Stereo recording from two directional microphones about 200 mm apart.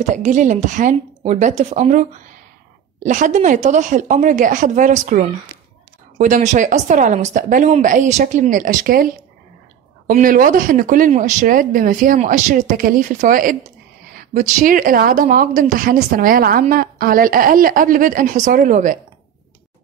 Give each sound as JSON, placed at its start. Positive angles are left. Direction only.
{"t": 0.0, "sound": "speech", "side_deg": -40}